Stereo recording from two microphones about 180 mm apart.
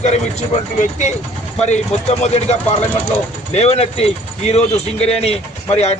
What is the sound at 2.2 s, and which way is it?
Speech, 40° left (ahead or behind).